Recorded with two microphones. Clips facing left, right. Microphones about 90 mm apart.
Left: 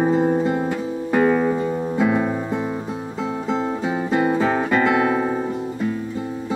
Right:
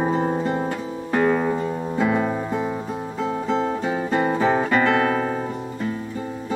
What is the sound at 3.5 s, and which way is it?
Music, 5° left (ahead or behind).